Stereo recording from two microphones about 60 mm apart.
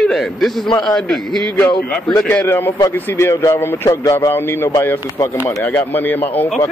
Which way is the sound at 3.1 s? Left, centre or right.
Left.